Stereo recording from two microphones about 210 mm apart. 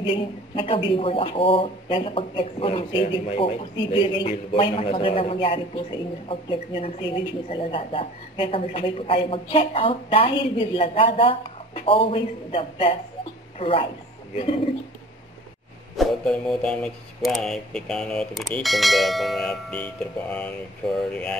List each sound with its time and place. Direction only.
0.0 s a man's voice: 25° left (ahead or behind)
16.0 s speech: 5° left (ahead or behind)